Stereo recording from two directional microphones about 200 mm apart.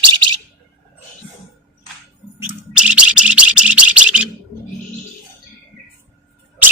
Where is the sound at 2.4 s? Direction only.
5° right (ahead or behind).